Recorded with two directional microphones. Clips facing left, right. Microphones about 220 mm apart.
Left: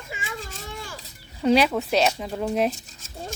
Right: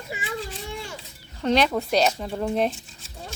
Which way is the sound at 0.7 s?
25° right (ahead or behind).